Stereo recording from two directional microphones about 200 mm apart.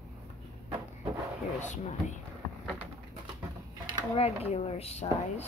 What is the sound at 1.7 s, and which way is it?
Speech, 35° left (ahead or behind).